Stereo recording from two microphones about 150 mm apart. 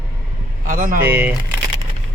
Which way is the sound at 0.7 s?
65° right (ahead or behind).